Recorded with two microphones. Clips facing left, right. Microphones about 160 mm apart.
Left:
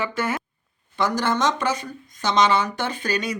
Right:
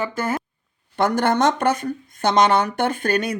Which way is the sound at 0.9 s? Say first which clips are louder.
Right 4 dB; 60° right (ahead or behind).